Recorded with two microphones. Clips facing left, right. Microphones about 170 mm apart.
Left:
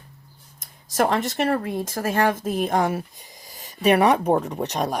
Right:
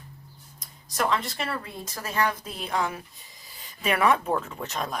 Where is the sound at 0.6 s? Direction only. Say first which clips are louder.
Left 6 dB; 50° left (ahead or behind).